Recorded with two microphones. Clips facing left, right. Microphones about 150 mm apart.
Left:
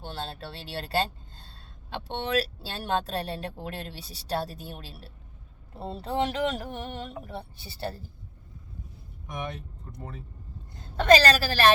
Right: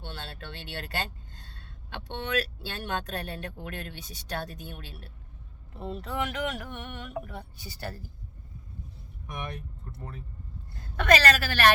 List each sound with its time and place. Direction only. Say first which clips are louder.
0.0 s speech: left 5 dB; 35° left (ahead or behind)
10.8 s speech: left 4 dB; 30° left (ahead or behind)